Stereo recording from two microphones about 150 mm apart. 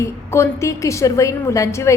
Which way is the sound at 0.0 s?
20° left (ahead or behind).